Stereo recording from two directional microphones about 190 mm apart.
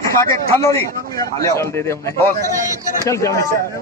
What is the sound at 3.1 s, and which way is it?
Speech, 15° left (ahead or behind).